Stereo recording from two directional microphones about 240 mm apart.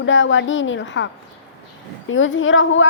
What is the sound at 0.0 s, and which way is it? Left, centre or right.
Speech, left.